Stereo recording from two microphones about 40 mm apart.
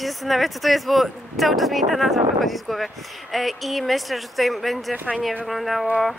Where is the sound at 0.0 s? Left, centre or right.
Centre.